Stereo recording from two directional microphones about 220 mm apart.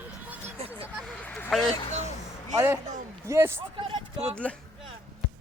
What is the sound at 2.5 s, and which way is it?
Speech, 10° right (ahead or behind).